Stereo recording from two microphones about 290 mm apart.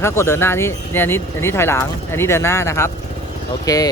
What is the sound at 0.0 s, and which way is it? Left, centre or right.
Speech, centre.